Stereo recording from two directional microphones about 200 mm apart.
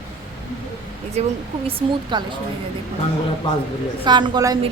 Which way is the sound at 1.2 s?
30° right (ahead or behind).